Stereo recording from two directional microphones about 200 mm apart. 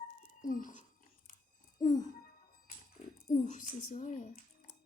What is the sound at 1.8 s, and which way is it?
Music, 20° left (ahead or behind).